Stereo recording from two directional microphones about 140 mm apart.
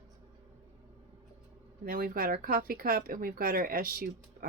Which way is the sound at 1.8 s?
90° right.